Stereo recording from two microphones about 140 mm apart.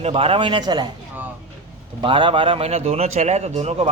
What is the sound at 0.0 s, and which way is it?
Speech, 45° right (ahead or behind).